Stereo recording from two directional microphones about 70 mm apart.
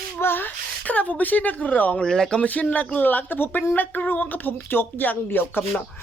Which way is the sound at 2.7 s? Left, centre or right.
Left.